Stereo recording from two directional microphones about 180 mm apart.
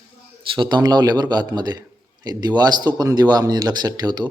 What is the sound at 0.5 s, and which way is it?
Speech, 25° right (ahead or behind).